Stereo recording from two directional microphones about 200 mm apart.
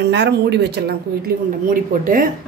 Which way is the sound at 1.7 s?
45° right (ahead or behind).